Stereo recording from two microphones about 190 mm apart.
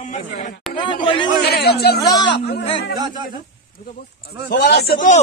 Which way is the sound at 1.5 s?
55° left (ahead or behind).